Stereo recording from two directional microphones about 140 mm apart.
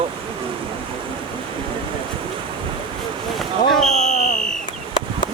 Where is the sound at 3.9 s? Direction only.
60° left (ahead or behind).